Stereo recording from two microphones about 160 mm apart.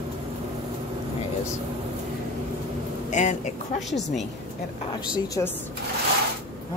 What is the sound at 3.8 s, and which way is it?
Speech, centre (ahead or behind).